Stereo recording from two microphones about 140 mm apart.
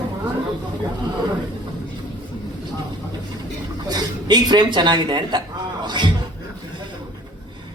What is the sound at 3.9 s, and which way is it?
A man's voice, 30° right (ahead or behind).